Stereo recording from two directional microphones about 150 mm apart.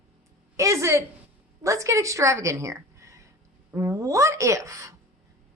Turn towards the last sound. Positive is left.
turn(degrees=-20)  # may be behind; listen again after turning